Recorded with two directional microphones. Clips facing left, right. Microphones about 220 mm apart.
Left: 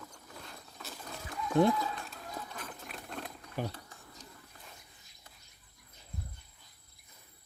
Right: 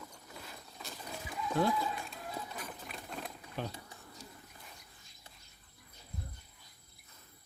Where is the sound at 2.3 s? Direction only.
5° right (ahead or behind).